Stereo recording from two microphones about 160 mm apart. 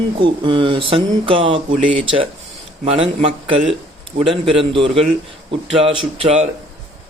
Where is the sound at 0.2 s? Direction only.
30° right (ahead or behind).